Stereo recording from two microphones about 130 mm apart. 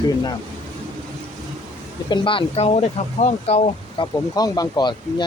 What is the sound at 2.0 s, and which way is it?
Speech, 40° left (ahead or behind).